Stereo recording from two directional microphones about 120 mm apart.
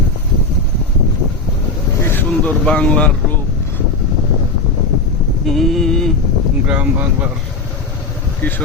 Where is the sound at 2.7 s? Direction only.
10° left (ahead or behind).